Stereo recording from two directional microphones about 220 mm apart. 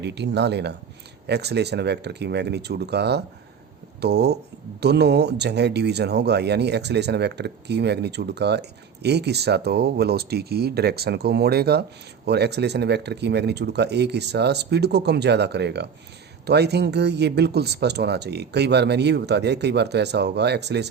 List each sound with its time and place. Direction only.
0.0 s speech: 50° right (ahead or behind)